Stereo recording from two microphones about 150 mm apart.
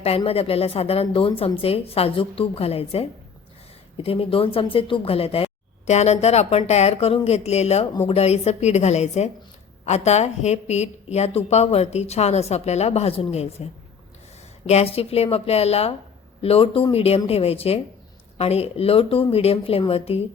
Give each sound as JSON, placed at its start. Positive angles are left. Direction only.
{"t": 0.3, "sound": "a woman's voice", "side_deg": 40}
{"t": 14.7, "sound": "a woman's voice", "side_deg": 45}